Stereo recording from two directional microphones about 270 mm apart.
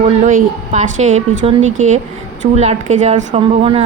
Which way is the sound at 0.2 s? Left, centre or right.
Right.